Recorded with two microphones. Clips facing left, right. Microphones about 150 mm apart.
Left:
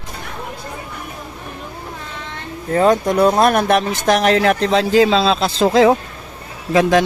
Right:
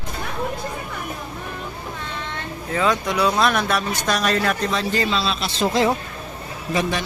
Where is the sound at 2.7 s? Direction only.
45° left (ahead or behind); by 5.0 s 90° left.